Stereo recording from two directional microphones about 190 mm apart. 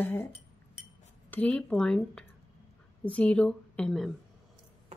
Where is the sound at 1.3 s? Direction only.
10° left (ahead or behind).